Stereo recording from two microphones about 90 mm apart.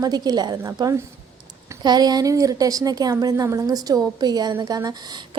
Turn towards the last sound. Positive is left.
turn(degrees=-50)  # may be behind; listen again after turning